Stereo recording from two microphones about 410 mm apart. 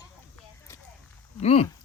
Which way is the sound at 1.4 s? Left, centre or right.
Centre.